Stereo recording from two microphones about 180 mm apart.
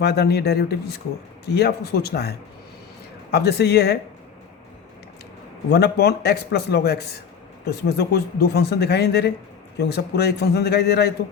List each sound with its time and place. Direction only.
0.0 s speech: 65° left (ahead or behind)
3.3 s speech: 65° left (ahead or behind)
5.7 s speech: 65° left (ahead or behind)